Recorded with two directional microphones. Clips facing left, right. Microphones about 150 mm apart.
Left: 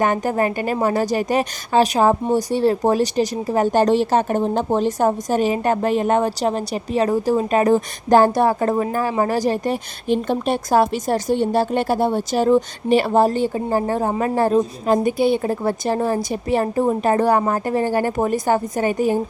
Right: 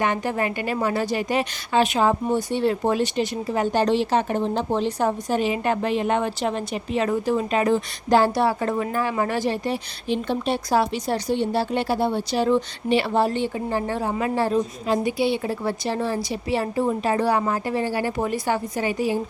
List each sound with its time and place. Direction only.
0.0 s a woman's voice: 45° left (ahead or behind)